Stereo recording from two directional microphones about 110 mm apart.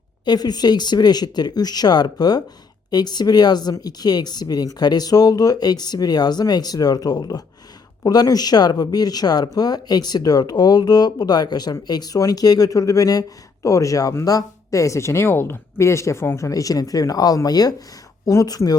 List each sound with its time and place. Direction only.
0.3 s speech: 40° left (ahead or behind)